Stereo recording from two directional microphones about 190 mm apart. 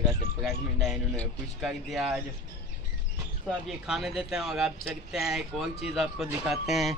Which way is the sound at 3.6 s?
Centre (ahead or behind).